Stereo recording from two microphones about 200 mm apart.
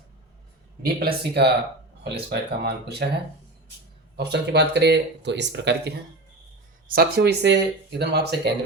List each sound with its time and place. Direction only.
0.9 s speech: 50° right (ahead or behind)
4.2 s speech: 60° right (ahead or behind)
6.8 s speech: 50° right (ahead or behind)